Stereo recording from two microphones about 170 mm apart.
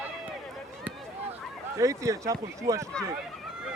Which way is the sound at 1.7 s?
20° right (ahead or behind).